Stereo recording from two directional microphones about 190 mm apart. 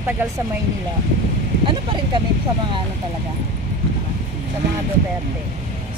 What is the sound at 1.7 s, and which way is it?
Speech, 25° right (ahead or behind).